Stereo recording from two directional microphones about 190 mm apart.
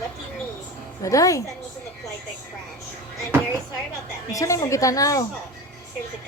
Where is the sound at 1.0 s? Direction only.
15° left (ahead or behind).